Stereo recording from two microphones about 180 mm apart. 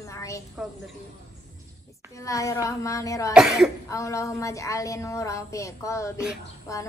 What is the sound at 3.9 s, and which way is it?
Child singing, 15° left (ahead or behind).